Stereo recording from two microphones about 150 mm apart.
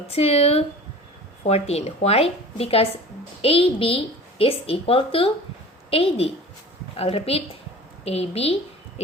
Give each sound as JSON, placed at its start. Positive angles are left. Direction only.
{"t": 0.1, "sound": "a woman's voice", "side_deg": 40}